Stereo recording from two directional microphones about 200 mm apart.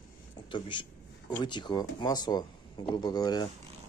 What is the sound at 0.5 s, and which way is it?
Speech, 25° left (ahead or behind).